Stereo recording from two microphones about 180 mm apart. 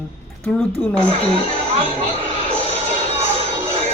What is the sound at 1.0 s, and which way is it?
Speech, 35° left (ahead or behind).